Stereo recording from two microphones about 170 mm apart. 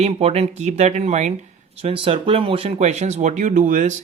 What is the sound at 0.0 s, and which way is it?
Speech, 35° right (ahead or behind).